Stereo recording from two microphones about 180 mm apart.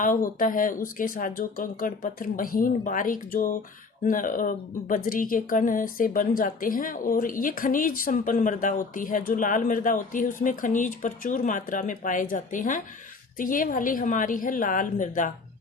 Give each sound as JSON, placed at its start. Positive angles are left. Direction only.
{"t": 0.0, "sound": "a woman's voice", "side_deg": 50}